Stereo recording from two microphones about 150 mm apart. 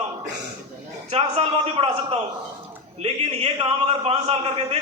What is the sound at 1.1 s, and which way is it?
A man's voice, 45° right (ahead or behind).